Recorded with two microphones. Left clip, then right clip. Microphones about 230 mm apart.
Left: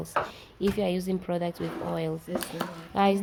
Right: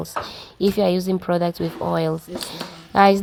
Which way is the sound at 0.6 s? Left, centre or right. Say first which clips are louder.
Right 9 dB; right.